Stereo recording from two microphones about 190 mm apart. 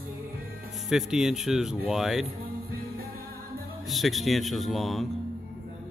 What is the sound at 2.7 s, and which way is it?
Music, 55° right (ahead or behind).